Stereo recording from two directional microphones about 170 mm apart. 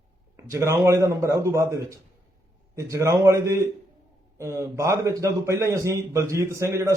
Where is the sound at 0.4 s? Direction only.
15° right (ahead or behind).